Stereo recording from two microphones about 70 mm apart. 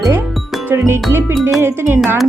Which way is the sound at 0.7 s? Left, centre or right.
Right.